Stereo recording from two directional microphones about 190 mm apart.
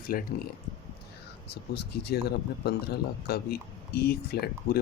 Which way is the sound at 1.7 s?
60° left (ahead or behind).